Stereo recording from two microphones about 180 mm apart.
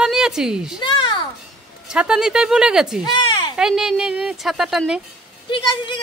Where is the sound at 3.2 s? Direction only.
30° left (ahead or behind).